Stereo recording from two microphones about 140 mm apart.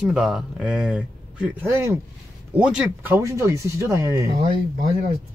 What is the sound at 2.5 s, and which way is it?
Speech, 10° right (ahead or behind).